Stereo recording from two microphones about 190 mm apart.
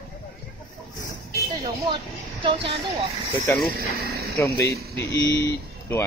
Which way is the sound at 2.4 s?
30° right (ahead or behind).